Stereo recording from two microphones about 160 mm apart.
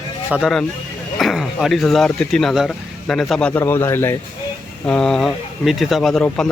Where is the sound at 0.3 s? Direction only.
Centre (ahead or behind).